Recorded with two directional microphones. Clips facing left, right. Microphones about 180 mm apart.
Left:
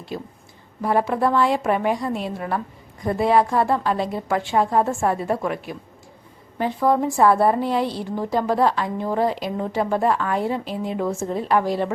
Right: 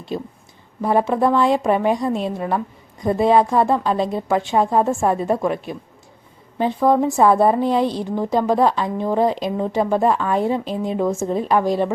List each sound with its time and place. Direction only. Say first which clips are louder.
0.1 s a woman's voice: right 5 dB; 25° right (ahead or behind)